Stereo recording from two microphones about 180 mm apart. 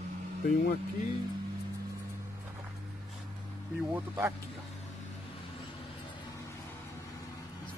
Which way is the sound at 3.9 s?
15° right (ahead or behind).